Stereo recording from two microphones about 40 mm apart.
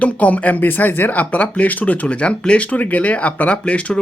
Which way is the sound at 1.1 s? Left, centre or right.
Left.